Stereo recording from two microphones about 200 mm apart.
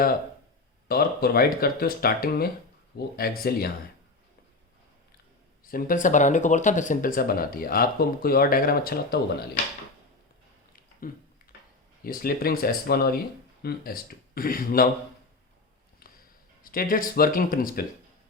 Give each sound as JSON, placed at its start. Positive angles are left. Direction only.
{"t": 0.9, "sound": "speech", "side_deg": 50}
{"t": 5.6, "sound": "speech", "side_deg": 45}
{"t": 11.1, "sound": "speech", "side_deg": 45}
{"t": 16.0, "sound": "a sound", "side_deg": 45}
{"t": 16.6, "sound": "speech", "side_deg": 45}